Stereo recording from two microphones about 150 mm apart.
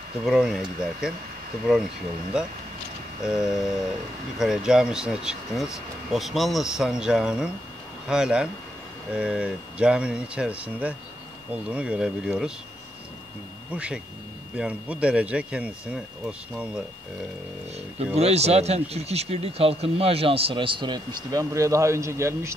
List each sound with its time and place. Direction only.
0.2 s speech: 5° right (ahead or behind)
2.3 s speech: 5° right (ahead or behind)
13.7 s speech: 10° right (ahead or behind)
17.9 s speech: 45° right (ahead or behind); by 22.5 s 20° right (ahead or behind)